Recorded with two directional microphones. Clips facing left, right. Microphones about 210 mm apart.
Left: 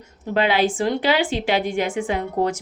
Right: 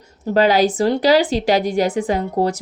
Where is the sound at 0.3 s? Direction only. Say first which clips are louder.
Right 5 dB; 40° right (ahead or behind).